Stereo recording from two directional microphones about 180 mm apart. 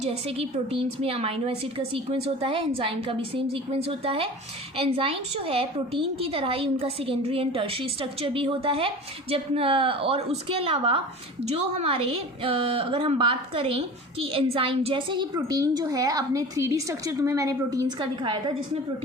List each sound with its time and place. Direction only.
0.0 s a woman's voice: 35° right (ahead or behind)